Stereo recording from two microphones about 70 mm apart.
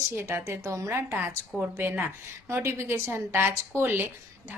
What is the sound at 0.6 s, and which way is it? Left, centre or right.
Speech, right.